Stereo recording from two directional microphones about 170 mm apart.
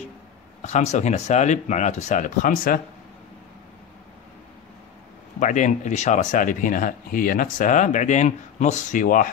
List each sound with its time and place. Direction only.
0.6 s speech: 45° left (ahead or behind)
5.4 s speech: 45° left (ahead or behind)